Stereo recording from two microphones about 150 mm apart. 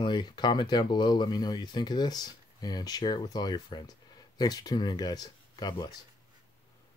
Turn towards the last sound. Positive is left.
turn(degrees=25)  # may be behind; listen again after turning